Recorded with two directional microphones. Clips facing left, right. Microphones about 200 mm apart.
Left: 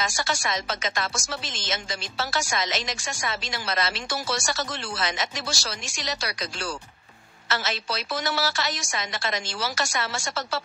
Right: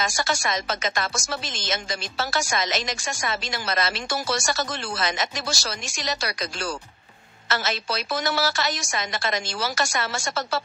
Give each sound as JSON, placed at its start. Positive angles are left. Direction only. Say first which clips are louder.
{"t": 0.0, "sound": "speech", "louder": "right 2 dB", "side_deg": -45}